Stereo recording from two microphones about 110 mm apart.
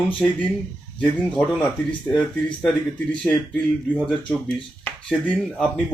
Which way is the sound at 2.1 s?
10° left (ahead or behind).